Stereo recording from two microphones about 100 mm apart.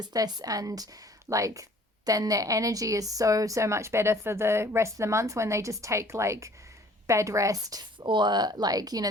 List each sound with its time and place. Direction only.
0.0 s a woman's voice: 40° right (ahead or behind)
7.9 s speech: 50° right (ahead or behind)